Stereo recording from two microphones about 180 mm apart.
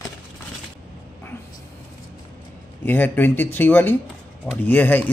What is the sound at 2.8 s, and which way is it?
Speech, 10° left (ahead or behind).